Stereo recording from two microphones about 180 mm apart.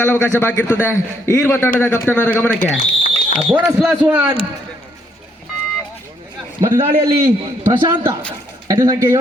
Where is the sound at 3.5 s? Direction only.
5° right (ahead or behind).